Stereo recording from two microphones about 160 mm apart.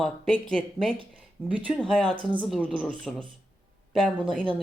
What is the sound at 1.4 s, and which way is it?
Speech, 10° right (ahead or behind).